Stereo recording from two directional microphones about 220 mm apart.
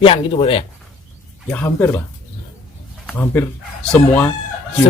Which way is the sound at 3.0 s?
10° left (ahead or behind).